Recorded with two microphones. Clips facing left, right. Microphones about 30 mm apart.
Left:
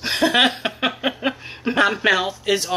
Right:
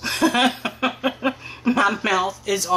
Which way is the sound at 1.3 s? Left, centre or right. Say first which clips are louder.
Right 2 dB; left.